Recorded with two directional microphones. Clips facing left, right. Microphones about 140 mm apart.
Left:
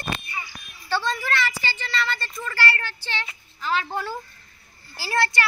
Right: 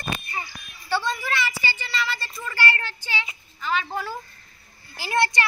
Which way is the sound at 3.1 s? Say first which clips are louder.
Right 1 dB; 10° right (ahead or behind).